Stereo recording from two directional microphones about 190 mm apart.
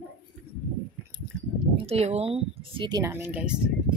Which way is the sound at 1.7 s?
30° right (ahead or behind).